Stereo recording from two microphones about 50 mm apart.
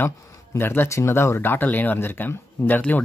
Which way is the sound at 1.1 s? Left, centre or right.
Left.